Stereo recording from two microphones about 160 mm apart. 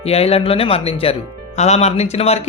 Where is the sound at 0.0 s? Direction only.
40° left (ahead or behind).